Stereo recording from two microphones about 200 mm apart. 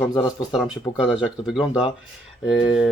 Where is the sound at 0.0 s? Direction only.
15° left (ahead or behind).